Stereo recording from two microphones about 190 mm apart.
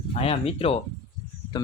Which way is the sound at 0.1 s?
30° left (ahead or behind).